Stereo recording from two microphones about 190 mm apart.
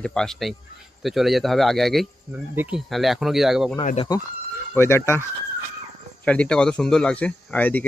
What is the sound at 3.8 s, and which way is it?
Speech, 40° left (ahead or behind).